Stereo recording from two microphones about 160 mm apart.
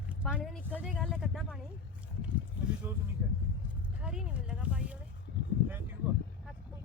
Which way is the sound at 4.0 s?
5° right (ahead or behind).